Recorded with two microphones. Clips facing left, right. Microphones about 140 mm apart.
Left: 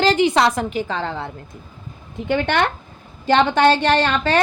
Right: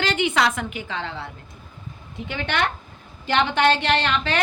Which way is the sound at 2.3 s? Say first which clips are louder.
Left 8 dB; 50° left (ahead or behind).